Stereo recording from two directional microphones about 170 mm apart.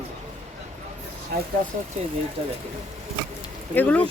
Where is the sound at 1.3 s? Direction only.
60° right (ahead or behind).